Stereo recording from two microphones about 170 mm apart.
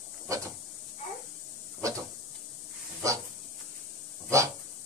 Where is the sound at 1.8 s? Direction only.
20° right (ahead or behind).